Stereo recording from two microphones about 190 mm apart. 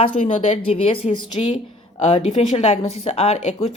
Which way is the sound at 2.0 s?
30° left (ahead or behind).